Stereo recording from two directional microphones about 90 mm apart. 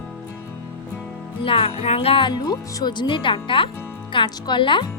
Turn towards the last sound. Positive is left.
turn(degrees=65)  # may be behind; listen again after turning